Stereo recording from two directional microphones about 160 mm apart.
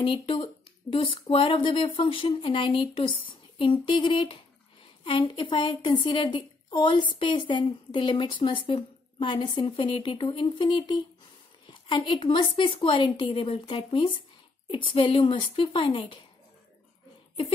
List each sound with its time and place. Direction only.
0.0 s a woman's voice: 35° left (ahead or behind)